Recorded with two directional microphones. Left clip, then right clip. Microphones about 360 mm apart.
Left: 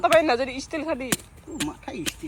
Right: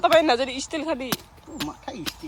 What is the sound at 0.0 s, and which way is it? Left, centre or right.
Speech, centre.